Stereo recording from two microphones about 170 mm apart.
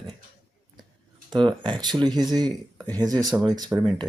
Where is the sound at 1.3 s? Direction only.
30° right (ahead or behind).